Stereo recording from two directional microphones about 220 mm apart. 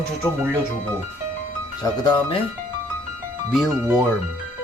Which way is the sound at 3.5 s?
Centre (ahead or behind).